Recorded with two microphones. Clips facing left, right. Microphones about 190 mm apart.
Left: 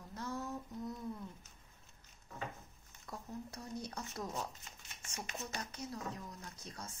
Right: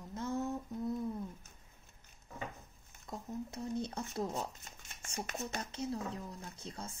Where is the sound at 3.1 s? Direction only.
25° right (ahead or behind).